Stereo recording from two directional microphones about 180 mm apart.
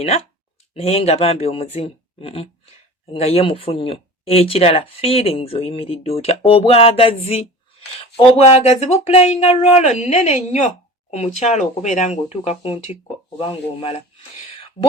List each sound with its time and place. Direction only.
0.7 s speech: 35° left (ahead or behind)